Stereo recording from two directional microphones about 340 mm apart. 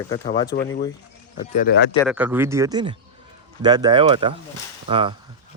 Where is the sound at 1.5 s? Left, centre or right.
Left.